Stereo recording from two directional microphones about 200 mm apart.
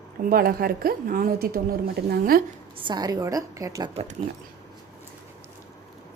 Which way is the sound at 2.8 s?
20° right (ahead or behind).